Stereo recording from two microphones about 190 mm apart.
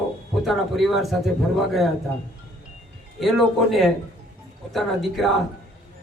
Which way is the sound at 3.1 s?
Centre (ahead or behind).